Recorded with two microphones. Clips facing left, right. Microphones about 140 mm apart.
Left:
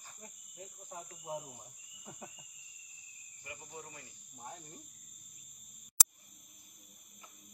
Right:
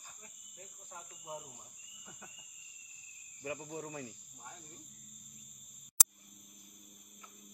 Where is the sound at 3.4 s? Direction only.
90° right.